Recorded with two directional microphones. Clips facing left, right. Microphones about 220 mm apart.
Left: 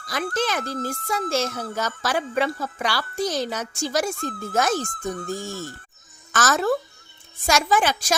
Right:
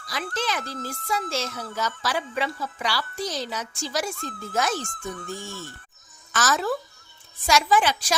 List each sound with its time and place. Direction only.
0.0 s speech: 50° left (ahead or behind)